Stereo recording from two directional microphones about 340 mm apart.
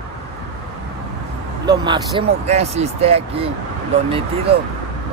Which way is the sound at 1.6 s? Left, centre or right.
Centre.